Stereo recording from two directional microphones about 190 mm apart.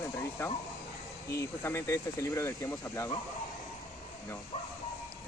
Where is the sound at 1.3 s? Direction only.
15° left (ahead or behind).